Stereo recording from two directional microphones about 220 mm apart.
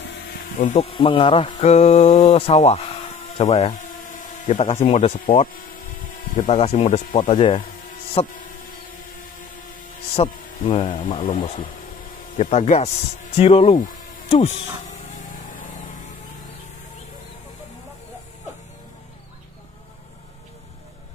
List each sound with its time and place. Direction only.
0.6 s speech: 30° left (ahead or behind)
3.5 s a sound: 30° left (ahead or behind)
4.8 s speech: 30° left (ahead or behind)
8.1 s music: 25° left (ahead or behind)
10.1 s speech: 25° left (ahead or behind)
12.4 s speech: 30° left (ahead or behind)
13.4 s a sound: 30° left (ahead or behind)